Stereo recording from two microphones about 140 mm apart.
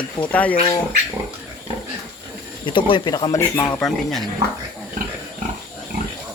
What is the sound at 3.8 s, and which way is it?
Speech, centre (ahead or behind).